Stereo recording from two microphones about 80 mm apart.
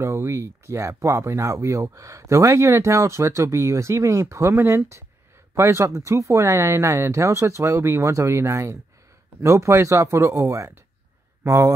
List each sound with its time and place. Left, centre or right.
0.0 s speech: right